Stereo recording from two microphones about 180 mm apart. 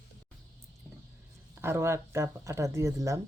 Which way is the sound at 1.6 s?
15° right (ahead or behind).